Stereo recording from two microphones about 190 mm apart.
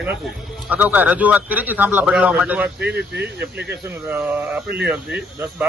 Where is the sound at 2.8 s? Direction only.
60° right (ahead or behind).